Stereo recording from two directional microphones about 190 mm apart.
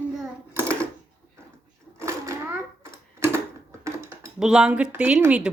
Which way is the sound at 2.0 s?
15° right (ahead or behind).